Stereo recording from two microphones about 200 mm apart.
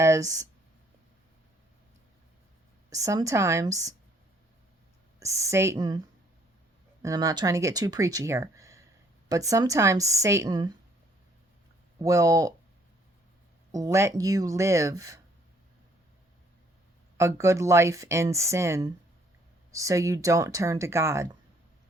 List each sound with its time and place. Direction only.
0.0 s speech: 15° right (ahead or behind)
2.9 s speech: 15° right (ahead or behind)
5.2 s speech: 15° right (ahead or behind)
7.0 s speech: 15° right (ahead or behind)
11.9 s speech: 15° right (ahead or behind)
13.7 s speech: 15° right (ahead or behind)
17.2 s speech: 15° right (ahead or behind)